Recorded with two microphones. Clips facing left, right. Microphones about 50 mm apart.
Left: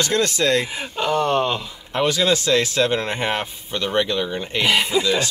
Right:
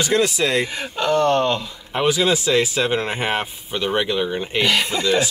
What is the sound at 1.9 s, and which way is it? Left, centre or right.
Speech, centre.